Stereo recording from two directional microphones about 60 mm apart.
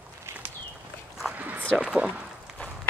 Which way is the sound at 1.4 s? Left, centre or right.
Right.